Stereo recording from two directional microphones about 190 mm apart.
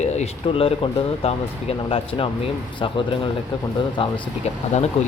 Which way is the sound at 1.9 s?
30° left (ahead or behind).